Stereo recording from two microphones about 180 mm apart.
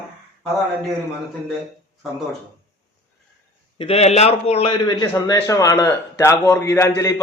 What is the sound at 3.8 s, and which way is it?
A man's voice, 35° left (ahead or behind).